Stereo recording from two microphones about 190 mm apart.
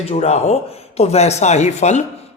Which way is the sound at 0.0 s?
35° left (ahead or behind).